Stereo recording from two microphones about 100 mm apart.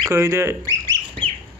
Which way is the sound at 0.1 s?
25° right (ahead or behind).